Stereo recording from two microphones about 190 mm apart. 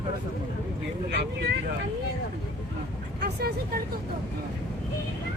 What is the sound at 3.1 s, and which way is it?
Speech, 55° right (ahead or behind).